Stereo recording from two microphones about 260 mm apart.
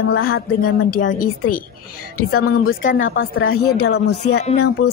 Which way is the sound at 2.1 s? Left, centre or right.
Left.